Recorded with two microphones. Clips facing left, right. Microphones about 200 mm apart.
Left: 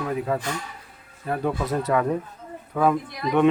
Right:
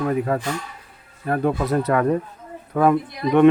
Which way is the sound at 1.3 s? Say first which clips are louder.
Right 4 dB; 60° right (ahead or behind).